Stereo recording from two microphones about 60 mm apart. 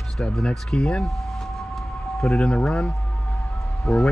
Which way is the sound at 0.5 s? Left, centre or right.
Centre.